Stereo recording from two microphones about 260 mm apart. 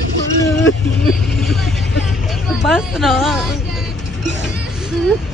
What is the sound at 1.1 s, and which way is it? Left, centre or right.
Vehicle, centre.